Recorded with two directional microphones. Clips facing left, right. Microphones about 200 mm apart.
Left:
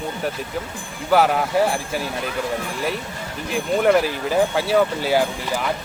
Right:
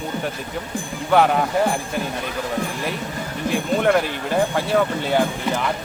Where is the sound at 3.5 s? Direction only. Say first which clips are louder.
Left 1 dB; centre (ahead or behind).